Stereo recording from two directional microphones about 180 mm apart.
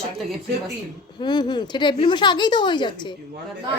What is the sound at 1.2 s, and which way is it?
Speech, 25° left (ahead or behind).